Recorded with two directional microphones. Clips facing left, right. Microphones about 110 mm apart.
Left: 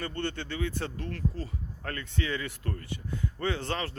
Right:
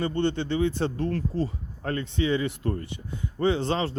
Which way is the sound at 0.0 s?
20° right (ahead or behind).